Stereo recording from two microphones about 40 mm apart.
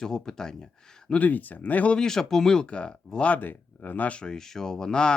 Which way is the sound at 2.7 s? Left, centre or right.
Left.